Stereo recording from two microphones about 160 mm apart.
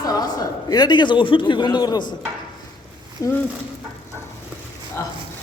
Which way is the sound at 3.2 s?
20° left (ahead or behind).